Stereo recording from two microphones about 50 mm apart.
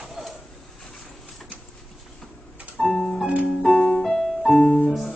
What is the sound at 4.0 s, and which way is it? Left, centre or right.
Music, centre.